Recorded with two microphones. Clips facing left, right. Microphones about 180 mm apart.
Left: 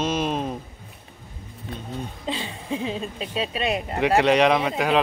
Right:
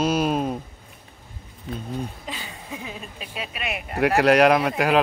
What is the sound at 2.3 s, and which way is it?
Speech, 25° left (ahead or behind).